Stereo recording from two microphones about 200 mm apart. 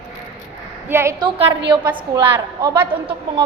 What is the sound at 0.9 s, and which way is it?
A woman's voice, 15° right (ahead or behind).